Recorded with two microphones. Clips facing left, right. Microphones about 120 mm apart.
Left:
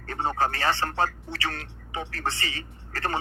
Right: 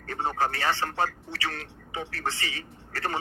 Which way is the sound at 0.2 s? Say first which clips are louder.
Left 2 dB; 40° left (ahead or behind).